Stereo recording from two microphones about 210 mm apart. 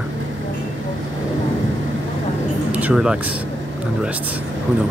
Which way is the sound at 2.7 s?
5° right (ahead or behind).